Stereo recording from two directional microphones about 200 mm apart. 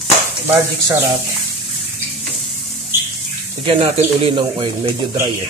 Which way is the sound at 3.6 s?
30° right (ahead or behind).